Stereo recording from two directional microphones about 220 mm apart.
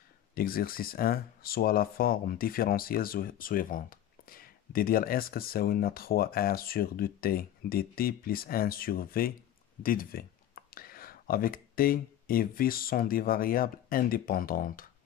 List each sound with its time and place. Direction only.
0.3 s speech: 40° left (ahead or behind)